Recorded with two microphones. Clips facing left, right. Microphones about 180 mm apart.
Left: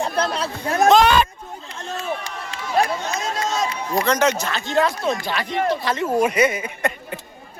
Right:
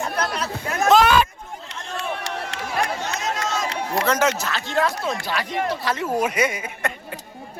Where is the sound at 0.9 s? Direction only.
5° right (ahead or behind).